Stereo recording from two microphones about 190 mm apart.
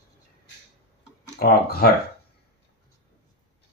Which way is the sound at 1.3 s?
50° left (ahead or behind).